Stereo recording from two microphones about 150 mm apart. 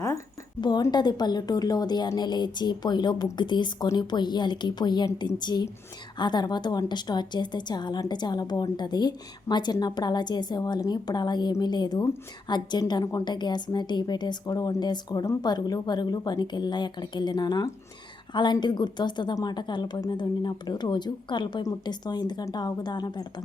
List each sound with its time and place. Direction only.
0.6 s a woman's voice: 30° left (ahead or behind)